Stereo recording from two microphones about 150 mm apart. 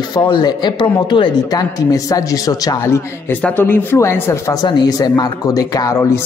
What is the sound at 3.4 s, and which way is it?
A woman's voice, 15° left (ahead or behind).